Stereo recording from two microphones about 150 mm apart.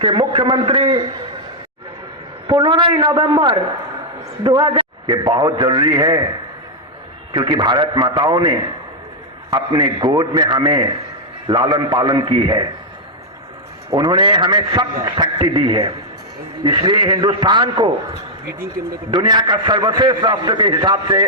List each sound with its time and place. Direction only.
0.0 s a man's voice: 35° right (ahead or behind)
2.5 s a man's voice: 30° right (ahead or behind)
7.3 s a man's voice: 30° right (ahead or behind)
13.9 s a man's voice: 30° right (ahead or behind)
19.1 s a man's voice: 30° right (ahead or behind)